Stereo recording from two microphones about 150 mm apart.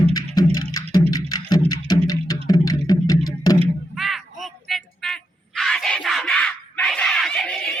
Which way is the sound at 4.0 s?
Centre (ahead or behind).